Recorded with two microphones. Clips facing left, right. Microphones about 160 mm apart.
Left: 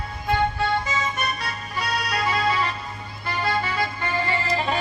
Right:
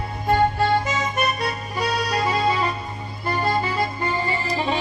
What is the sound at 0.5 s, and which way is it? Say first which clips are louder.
Music: right 4 dB; 50° right (ahead or behind).